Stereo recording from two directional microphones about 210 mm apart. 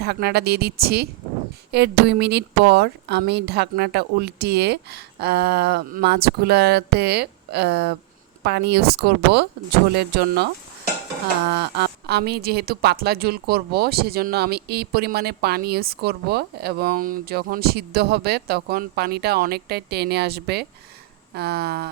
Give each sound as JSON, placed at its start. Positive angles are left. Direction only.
{"t": 0.0, "sound": "a woman's voice", "side_deg": -50}